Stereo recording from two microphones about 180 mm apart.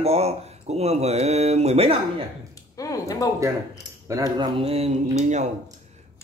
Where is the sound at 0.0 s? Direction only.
35° right (ahead or behind).